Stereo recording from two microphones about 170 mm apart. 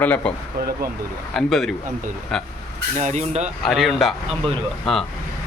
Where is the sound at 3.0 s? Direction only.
40° right (ahead or behind).